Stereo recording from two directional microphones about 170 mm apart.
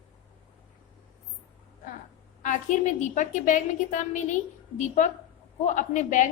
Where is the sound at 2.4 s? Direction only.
45° left (ahead or behind).